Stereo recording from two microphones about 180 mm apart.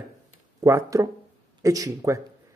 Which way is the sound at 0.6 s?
15° right (ahead or behind).